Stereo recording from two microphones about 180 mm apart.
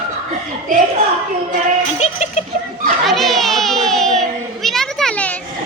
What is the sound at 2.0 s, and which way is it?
Music, 40° left (ahead or behind).